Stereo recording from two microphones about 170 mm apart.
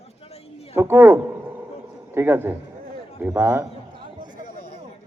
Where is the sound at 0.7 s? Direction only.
15° right (ahead or behind).